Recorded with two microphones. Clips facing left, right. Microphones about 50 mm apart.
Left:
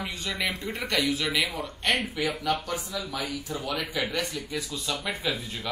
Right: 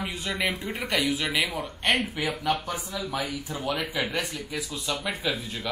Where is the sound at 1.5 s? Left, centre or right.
Right.